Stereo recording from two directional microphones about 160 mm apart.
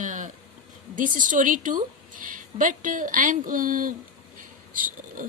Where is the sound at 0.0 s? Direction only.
50° right (ahead or behind).